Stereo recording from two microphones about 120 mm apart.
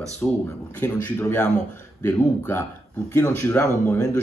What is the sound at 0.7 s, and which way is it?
Speech, 15° left (ahead or behind).